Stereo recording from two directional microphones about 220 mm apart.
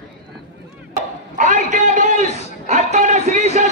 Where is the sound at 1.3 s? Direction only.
35° right (ahead or behind).